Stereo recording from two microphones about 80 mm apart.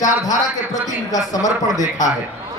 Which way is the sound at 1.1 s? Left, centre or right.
Left.